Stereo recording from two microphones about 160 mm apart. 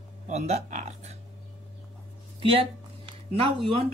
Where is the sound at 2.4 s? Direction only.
35° right (ahead or behind).